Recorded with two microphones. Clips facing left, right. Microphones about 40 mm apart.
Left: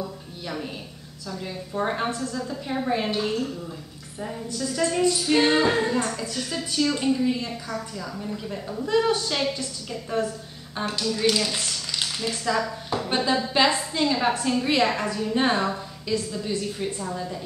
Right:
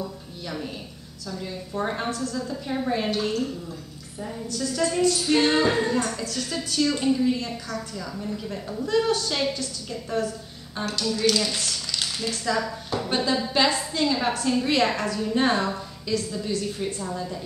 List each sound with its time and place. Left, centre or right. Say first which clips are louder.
0.0 s a sound: even; centre
1.7 s a woman's voice: left 2 dB; centre
2.0 s a woman's voice: even; left
2.3 s a woman's voice: even; centre
4.6 s a woman's voice: even; centre
11.0 s a woman's voice: even; centre
12.4 s a woman's voice: left 1 dB; centre